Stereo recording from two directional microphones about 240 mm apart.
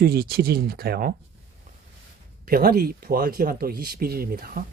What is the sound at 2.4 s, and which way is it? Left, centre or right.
Speech, right.